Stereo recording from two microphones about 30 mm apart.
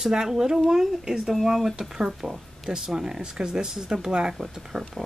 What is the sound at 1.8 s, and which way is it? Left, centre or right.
Speech, centre.